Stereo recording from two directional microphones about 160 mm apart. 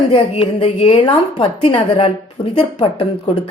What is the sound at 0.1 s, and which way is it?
A woman's voice, 35° left (ahead or behind).